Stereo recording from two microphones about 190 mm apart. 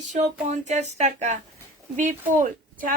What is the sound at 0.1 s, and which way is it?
Speech, 40° right (ahead or behind).